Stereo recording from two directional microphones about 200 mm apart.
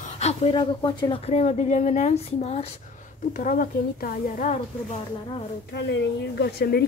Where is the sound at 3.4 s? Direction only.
45° left (ahead or behind).